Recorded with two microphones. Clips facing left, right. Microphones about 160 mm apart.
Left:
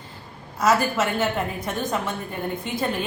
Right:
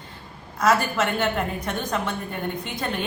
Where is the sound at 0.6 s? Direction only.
5° left (ahead or behind).